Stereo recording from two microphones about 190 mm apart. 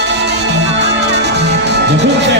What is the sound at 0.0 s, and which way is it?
Music, 65° right (ahead or behind).